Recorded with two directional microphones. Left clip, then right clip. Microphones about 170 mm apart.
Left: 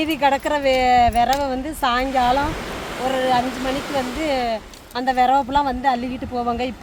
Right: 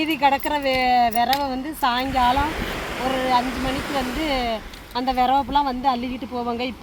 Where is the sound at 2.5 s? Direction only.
40° right (ahead or behind).